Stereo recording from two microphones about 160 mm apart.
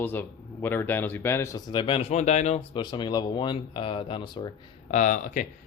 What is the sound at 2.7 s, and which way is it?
Speech, 30° left (ahead or behind).